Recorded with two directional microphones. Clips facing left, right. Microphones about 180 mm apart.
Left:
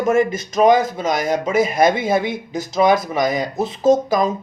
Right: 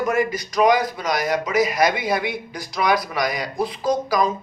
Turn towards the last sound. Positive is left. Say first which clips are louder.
# left 5 dB
turn(degrees=25)  # may be behind; listen again after turning